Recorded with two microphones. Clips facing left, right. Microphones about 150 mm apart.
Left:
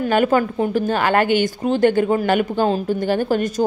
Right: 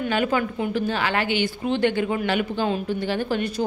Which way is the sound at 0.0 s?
45° left (ahead or behind).